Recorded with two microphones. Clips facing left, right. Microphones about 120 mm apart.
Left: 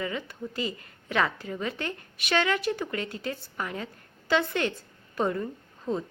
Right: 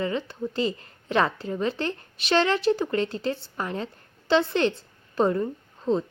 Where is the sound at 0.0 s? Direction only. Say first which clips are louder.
Right 5 dB; 30° right (ahead or behind).